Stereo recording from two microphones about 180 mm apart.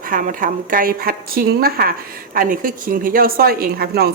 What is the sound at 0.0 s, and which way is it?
Speech, 50° right (ahead or behind).